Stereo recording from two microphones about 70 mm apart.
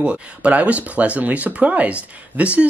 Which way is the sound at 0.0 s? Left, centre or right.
Centre.